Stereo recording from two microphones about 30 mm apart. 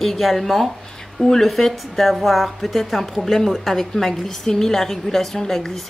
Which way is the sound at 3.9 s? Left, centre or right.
Centre.